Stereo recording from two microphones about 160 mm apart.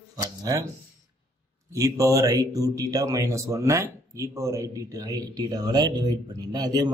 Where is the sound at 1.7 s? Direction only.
20° right (ahead or behind).